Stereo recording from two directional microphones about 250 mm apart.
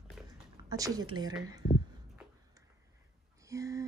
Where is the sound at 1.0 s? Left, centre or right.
Right.